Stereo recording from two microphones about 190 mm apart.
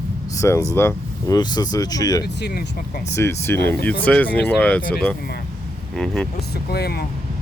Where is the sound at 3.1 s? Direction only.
15° left (ahead or behind).